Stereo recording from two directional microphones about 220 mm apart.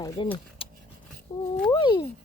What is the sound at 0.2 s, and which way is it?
Speech, 20° left (ahead or behind).